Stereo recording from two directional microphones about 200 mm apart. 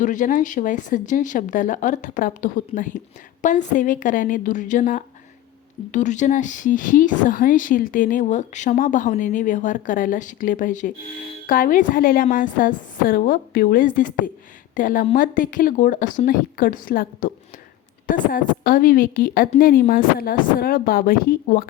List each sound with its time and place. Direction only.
0.0 s a woman's voice: 40° left (ahead or behind)